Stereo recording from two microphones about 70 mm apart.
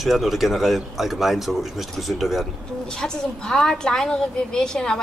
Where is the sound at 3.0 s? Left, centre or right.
Centre.